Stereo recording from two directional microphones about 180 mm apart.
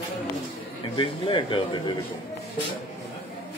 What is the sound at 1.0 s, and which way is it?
Speech, 30° left (ahead or behind).